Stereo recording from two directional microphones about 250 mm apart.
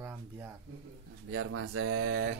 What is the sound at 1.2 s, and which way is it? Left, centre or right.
Speech, right.